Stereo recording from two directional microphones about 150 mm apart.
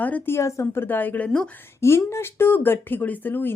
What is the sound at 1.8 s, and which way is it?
Speech, 15° left (ahead or behind).